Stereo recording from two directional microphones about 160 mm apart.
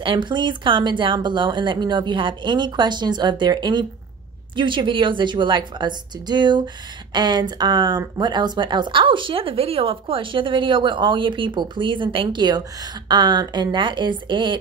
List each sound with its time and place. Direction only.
0.0 s speech: 30° right (ahead or behind)